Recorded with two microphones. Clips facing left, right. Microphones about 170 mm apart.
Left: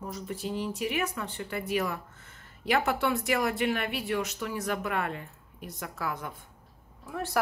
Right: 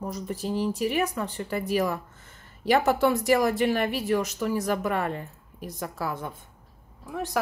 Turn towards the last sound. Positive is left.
turn(degrees=-15)  # may be behind; listen again after turning